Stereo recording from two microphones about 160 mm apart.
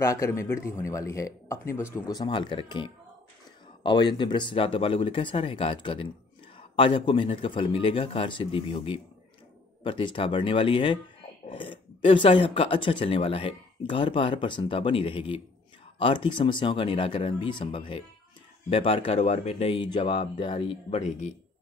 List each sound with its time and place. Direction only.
0.0 s speech: 20° left (ahead or behind); by 21.0 s 35° left (ahead or behind)